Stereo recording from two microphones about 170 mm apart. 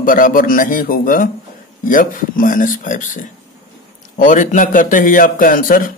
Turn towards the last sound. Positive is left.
turn(degrees=55)  # may be behind; listen again after turning